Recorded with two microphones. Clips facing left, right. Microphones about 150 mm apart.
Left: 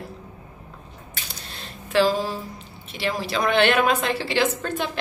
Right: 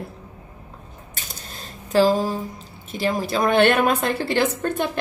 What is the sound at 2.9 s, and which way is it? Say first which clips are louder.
A woman's voice: right 3 dB; 45° right (ahead or behind).